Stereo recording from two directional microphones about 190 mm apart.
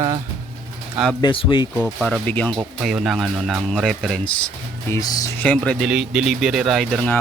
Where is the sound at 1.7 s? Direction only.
5° left (ahead or behind).